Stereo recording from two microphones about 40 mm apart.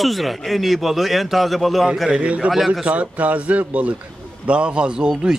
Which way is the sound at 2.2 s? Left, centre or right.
Right.